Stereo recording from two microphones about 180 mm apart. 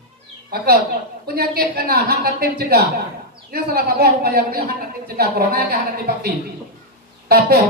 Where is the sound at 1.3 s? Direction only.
60° right (ahead or behind).